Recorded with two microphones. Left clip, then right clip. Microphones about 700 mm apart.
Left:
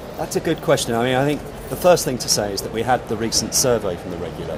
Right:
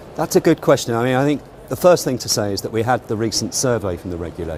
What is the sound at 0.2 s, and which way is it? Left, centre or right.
Speech, right.